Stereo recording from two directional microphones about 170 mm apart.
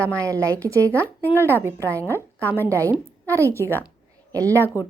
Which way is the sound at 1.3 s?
15° right (ahead or behind).